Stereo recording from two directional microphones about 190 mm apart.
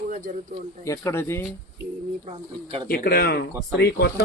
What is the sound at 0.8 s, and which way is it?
Speech, 15° left (ahead or behind).